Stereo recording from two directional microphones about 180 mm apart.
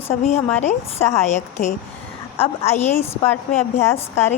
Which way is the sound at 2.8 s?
15° left (ahead or behind).